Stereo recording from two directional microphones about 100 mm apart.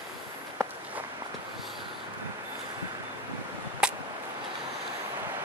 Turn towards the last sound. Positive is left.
turn(degrees=-10)  # may be behind; listen again after turning